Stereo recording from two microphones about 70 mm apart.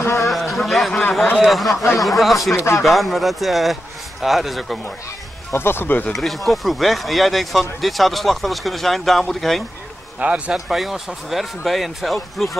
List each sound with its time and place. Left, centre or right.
0.2 s speech: centre
2.5 s speech: left
2.8 s speech: centre
5.5 s speech: left
6.1 s speech: centre
10.1 s a man's voice: centre
10.5 s speech: centre